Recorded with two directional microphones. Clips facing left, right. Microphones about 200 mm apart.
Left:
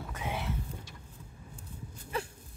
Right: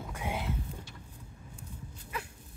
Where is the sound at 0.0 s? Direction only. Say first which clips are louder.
Right 1 dB; 10° right (ahead or behind).